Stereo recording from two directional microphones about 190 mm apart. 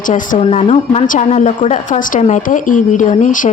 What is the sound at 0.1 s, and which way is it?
Speech, 40° left (ahead or behind).